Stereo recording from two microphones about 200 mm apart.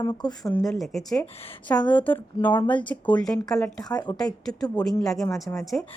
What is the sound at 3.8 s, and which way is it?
Speech, 20° left (ahead or behind).